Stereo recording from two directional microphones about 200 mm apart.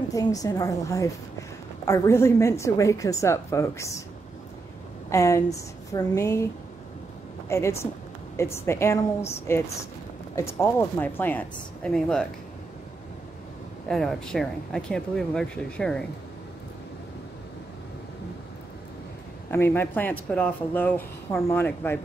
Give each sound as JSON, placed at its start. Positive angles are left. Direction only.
{"t": 0.1, "sound": "speech", "side_deg": 15}
{"t": 5.1, "sound": "speech", "side_deg": 15}
{"t": 7.4, "sound": "speech", "side_deg": 15}
{"t": 13.8, "sound": "speech", "side_deg": 0}
{"t": 19.5, "sound": "speech", "side_deg": 10}